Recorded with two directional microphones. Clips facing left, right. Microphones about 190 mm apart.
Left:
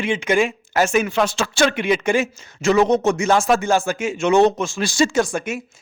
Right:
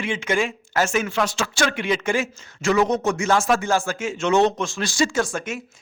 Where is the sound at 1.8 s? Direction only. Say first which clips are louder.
Left 4 dB; 15° left (ahead or behind).